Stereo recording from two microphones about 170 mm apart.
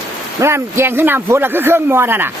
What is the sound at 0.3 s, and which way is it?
A man's voice, 15° right (ahead or behind).